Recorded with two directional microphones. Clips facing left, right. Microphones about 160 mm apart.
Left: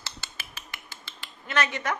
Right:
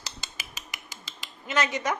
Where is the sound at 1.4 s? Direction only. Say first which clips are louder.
Right 1 dB; 15° right (ahead or behind).